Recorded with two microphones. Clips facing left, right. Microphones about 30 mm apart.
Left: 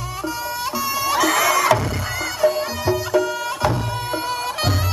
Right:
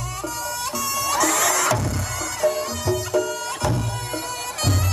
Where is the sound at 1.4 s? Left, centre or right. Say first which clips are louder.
Left 4 dB; left.